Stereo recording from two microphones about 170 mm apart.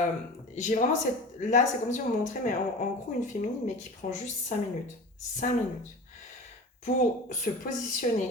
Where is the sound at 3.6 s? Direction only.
45° left (ahead or behind).